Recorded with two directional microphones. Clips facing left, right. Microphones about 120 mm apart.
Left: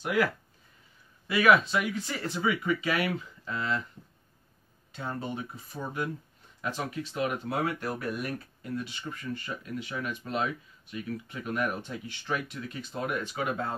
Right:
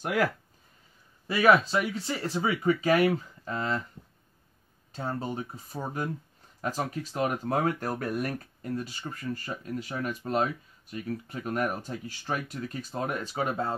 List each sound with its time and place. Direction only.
1.2 s speech: 35° right (ahead or behind)
4.9 s speech: 35° right (ahead or behind)